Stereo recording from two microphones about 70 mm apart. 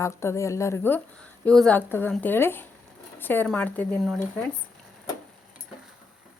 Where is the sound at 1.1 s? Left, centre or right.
Centre.